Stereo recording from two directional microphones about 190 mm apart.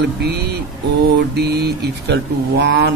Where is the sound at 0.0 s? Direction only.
60° right (ahead or behind).